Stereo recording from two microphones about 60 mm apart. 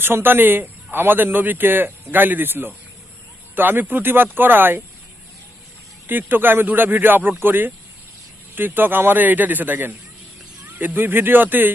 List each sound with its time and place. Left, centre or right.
0.0 s a man's voice: right
6.1 s a man's voice: right